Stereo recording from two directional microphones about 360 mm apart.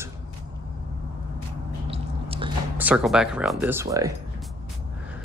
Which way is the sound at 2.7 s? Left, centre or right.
Centre.